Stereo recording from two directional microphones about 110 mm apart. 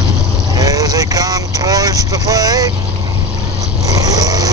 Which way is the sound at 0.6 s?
35° right (ahead or behind).